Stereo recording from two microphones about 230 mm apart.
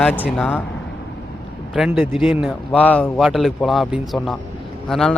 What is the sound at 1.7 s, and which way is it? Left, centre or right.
Speech, centre.